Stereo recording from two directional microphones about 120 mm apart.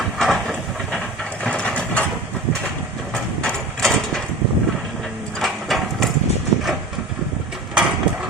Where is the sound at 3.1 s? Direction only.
5° left (ahead or behind).